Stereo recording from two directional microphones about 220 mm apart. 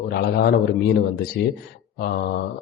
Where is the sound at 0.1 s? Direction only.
45° left (ahead or behind).